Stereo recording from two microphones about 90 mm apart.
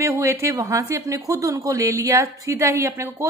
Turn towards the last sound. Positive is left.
turn(degrees=-30)  # may be behind; listen again after turning